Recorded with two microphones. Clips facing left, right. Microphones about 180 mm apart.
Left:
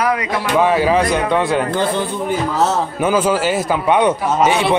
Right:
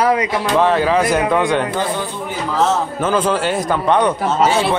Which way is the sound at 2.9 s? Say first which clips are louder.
Left 1 dB; 10° left (ahead or behind).